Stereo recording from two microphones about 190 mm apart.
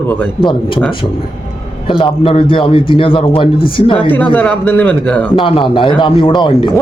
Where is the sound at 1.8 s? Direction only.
25° left (ahead or behind).